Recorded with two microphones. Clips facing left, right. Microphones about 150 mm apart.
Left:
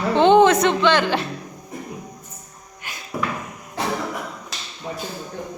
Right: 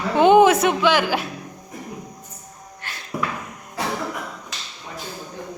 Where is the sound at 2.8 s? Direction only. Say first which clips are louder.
Left 1 dB; 10° left (ahead or behind).